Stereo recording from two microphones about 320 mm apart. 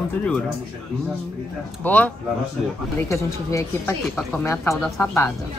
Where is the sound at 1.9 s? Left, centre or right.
Centre.